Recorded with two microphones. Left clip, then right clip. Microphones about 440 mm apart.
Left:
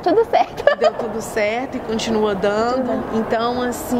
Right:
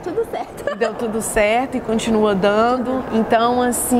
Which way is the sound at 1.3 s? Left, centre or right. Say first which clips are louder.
Right 5 dB; right.